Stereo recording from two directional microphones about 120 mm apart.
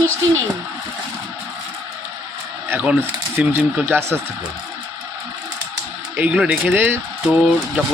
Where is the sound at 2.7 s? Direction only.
15° right (ahead or behind).